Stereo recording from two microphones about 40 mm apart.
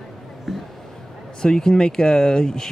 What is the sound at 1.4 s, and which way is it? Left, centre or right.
Speech, centre.